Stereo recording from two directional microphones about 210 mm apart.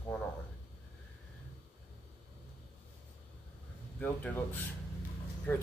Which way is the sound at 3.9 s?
10° left (ahead or behind).